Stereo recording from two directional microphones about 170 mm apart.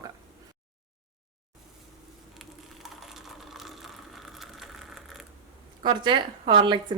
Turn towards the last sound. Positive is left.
turn(degrees=-30)  # may be behind; listen again after turning